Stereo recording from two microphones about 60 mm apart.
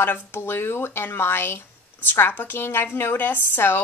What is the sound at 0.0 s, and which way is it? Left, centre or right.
A woman's voice, left.